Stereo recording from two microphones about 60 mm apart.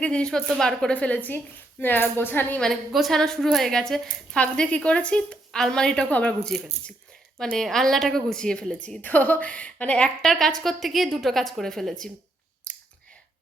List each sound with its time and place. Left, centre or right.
0.0 s a woman's voice: centre
0.9 s a woman's voice: left
2.9 s a woman's voice: centre
4.4 s a woman's voice: centre
6.1 s a woman's voice: left
7.3 s a woman's voice: centre
9.0 s a woman's voice: left
10.2 s a woman's voice: centre
12.7 s clicking: left